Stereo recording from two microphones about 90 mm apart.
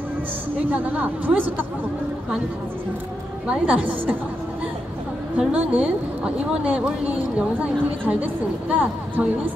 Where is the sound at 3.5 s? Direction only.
15° right (ahead or behind).